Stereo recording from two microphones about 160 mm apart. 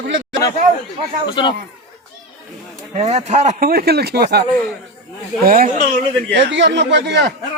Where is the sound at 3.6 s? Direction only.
70° right (ahead or behind); by 4.5 s 90° right.